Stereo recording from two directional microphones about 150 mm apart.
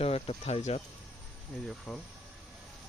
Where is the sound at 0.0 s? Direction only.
40° left (ahead or behind).